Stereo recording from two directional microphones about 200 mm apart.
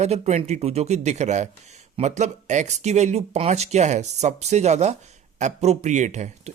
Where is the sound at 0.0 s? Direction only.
35° right (ahead or behind).